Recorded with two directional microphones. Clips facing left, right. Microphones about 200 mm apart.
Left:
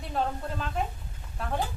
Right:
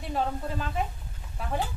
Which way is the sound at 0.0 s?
5° right (ahead or behind).